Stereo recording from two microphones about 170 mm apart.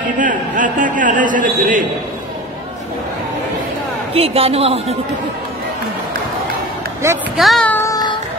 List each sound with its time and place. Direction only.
0.2 s a man's voice: 50° right (ahead or behind)
4.1 s a woman's voice: 35° right (ahead or behind)
7.0 s speech: 15° right (ahead or behind)
7.3 s speech: centre (ahead or behind)